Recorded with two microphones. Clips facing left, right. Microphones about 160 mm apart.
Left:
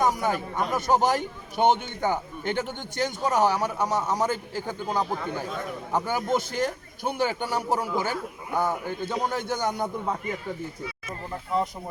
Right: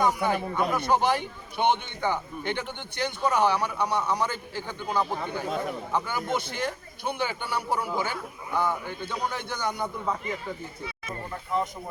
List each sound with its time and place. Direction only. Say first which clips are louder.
0.0 s a man's voice: even; 45° left (ahead or behind)